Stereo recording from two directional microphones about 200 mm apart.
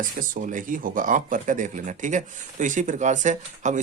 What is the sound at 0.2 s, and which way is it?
Speech, 40° right (ahead or behind).